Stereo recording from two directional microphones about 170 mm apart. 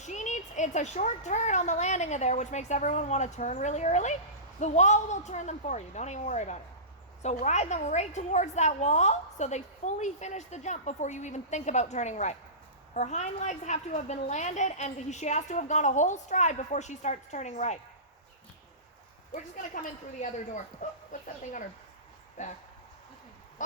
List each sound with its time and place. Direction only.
0.0 s a woman's voice: 45° left (ahead or behind)
19.3 s a woman's voice: 50° left (ahead or behind)
22.4 s a woman's voice: 45° left (ahead or behind)